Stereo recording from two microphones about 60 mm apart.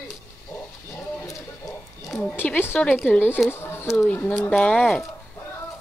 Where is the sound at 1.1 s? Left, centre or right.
Left.